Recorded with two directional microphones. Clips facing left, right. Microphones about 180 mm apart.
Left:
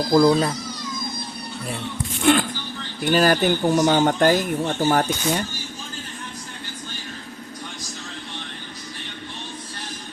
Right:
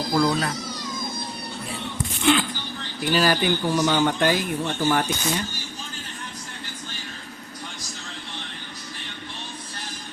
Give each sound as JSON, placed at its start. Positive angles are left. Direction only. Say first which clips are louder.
{"t": 0.2, "sound": "speech", "louder": "left 6 dB", "side_deg": 25}
{"t": 2.2, "sound": "speech", "louder": "left 3 dB", "side_deg": 50}